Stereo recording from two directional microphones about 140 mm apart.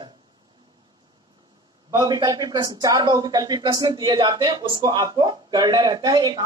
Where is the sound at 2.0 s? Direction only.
30° right (ahead or behind).